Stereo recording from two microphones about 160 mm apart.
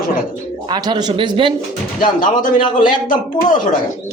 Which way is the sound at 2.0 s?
60° left (ahead or behind).